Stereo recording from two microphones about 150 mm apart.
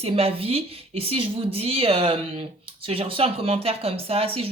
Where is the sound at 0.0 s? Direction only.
40° right (ahead or behind).